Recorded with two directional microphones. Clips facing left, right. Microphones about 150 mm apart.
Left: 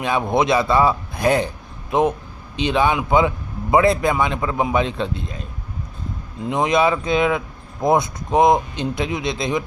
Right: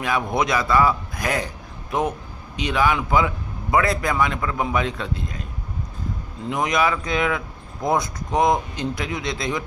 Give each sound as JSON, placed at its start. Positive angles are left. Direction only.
{"t": 0.0, "sound": "speech", "side_deg": 25}
{"t": 6.5, "sound": "speech", "side_deg": 25}